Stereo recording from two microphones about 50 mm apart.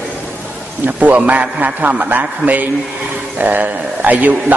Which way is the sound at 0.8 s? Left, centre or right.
Right.